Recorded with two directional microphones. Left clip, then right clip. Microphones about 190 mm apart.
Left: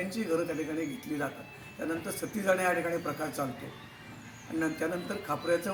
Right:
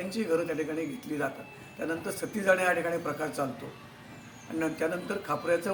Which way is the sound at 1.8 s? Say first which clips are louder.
Right 2 dB; 10° right (ahead or behind).